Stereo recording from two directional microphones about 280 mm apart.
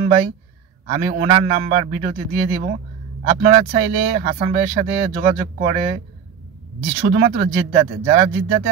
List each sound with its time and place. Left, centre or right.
0.0 s speech: right
7.0 s speech: right